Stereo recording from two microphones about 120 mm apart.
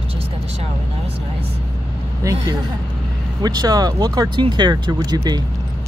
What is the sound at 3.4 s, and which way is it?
Speech, 35° right (ahead or behind).